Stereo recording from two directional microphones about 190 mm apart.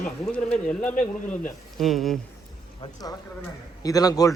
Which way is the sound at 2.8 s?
20° left (ahead or behind).